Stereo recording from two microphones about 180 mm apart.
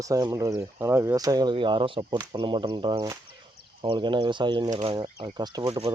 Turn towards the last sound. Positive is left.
turn(degrees=-30)  # may be behind; listen again after turning